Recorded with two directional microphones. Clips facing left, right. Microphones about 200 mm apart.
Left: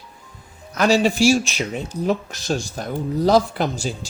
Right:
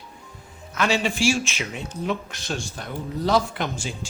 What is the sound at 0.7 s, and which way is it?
Speech, 40° left (ahead or behind).